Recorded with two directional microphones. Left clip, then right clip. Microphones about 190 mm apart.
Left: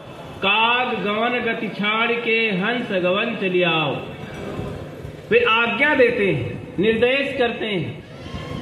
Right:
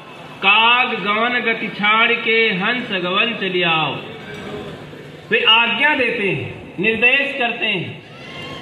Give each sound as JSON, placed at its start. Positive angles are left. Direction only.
{"t": 0.4, "sound": "a man's voice", "side_deg": 20}
{"t": 5.3, "sound": "a man's voice", "side_deg": 20}
{"t": 6.8, "sound": "a man's voice", "side_deg": 40}